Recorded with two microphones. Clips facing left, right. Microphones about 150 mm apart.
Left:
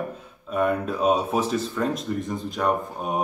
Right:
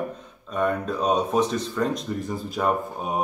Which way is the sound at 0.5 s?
5° left (ahead or behind).